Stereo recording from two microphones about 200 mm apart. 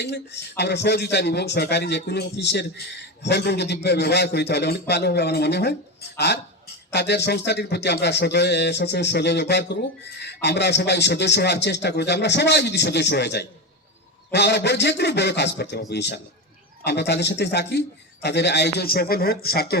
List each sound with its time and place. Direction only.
0.0 s speech: 55° left (ahead or behind)